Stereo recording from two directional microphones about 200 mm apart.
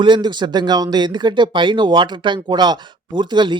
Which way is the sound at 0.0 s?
20° right (ahead or behind).